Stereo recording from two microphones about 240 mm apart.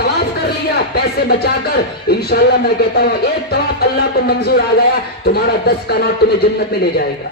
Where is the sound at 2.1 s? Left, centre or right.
Left.